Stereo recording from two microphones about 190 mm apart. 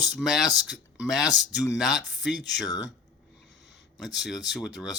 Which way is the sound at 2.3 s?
65° left (ahead or behind).